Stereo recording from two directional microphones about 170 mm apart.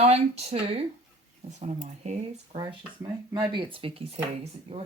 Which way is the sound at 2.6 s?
20° right (ahead or behind).